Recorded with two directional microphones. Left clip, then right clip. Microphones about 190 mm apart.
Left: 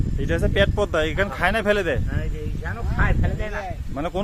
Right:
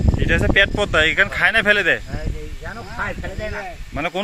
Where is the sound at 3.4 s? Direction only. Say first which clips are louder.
Right 2 dB; 5° left (ahead or behind).